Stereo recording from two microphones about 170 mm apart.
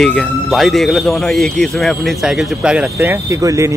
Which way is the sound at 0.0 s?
Centre (ahead or behind).